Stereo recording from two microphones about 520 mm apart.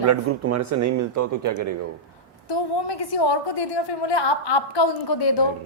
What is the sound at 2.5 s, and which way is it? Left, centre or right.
A woman's voice, left.